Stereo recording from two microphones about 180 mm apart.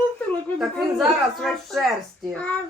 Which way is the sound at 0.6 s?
Centre (ahead or behind).